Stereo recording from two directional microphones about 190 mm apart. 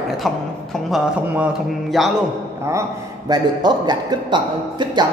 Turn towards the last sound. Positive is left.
turn(degrees=-25)  # may be behind; listen again after turning